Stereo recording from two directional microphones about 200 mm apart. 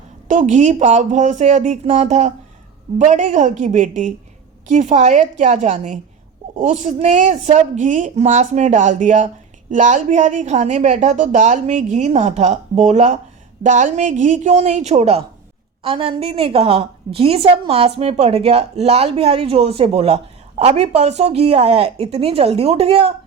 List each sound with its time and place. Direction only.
0.3 s a woman's voice: 35° right (ahead or behind)